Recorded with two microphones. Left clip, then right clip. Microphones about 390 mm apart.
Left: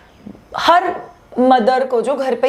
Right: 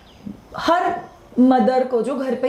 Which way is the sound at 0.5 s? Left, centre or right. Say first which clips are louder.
Left 5 dB; left.